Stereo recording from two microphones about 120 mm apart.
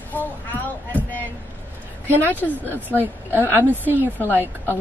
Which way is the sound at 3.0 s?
15° right (ahead or behind).